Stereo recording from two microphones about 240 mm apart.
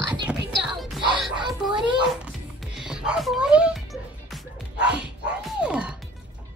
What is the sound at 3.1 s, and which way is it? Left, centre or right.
Music, centre.